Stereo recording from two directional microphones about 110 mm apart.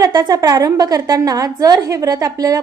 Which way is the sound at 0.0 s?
40° right (ahead or behind).